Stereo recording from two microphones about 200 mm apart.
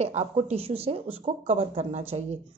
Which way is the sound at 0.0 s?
35° right (ahead or behind).